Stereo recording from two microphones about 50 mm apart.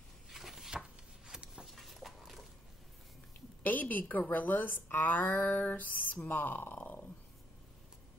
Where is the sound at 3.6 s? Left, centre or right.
Left.